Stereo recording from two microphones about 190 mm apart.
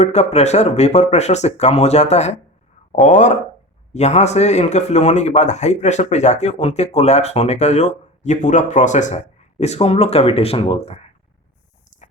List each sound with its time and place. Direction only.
0.0 s speech: 35° left (ahead or behind)